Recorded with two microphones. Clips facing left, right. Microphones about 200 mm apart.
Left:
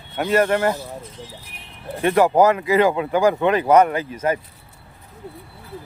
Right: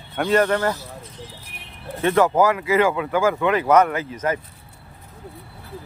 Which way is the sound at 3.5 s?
30° left (ahead or behind).